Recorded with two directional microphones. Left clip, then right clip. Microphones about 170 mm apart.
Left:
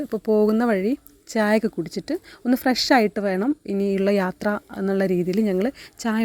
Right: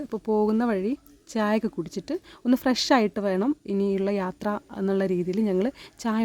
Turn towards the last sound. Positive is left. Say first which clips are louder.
# left 3 dB
turn(degrees=10)  # may be behind; listen again after turning